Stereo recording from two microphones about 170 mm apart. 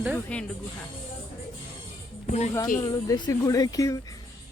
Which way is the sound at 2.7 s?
20° left (ahead or behind).